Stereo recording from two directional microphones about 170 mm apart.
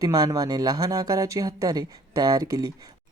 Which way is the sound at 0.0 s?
20° right (ahead or behind).